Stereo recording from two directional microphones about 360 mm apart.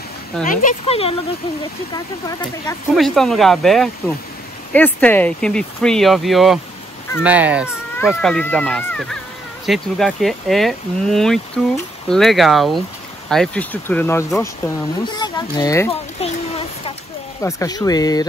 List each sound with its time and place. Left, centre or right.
0.5 s speech: left
2.9 s speech: centre